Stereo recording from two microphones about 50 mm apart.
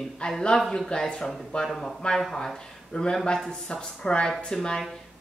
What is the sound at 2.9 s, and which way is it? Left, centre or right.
A woman's voice, left.